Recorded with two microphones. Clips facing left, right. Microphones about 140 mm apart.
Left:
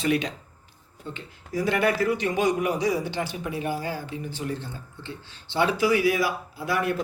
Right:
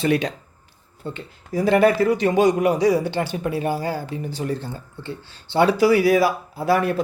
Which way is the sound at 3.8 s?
35° right (ahead or behind).